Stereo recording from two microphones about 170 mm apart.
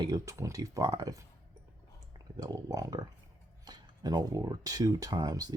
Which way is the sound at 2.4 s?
20° right (ahead or behind).